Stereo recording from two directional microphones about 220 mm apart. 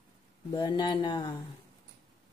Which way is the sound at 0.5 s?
20° left (ahead or behind).